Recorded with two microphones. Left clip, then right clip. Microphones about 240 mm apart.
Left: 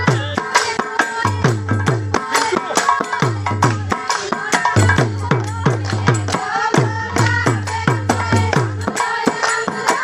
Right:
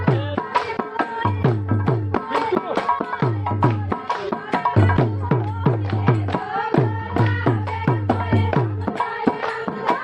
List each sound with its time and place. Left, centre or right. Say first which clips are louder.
0.0 s music: left 4 dB; left